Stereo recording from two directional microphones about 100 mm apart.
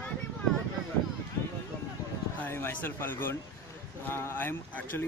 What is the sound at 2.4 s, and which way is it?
Speech, 20° left (ahead or behind).